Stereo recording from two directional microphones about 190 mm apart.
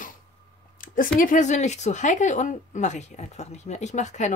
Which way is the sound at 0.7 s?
45° left (ahead or behind).